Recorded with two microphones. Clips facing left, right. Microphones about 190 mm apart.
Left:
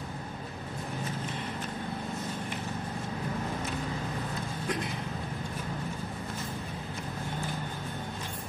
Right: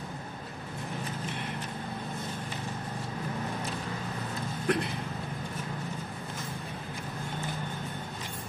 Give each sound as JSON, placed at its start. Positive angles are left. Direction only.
{"t": 4.7, "sound": "speech", "side_deg": -60}